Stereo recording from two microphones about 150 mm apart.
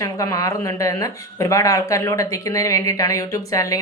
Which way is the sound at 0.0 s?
25° left (ahead or behind).